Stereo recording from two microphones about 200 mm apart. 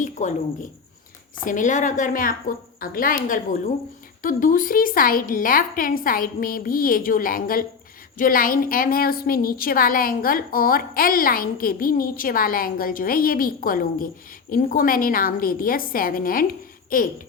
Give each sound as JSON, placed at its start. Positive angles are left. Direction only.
{"t": 0.0, "sound": "a woman's voice", "side_deg": 40}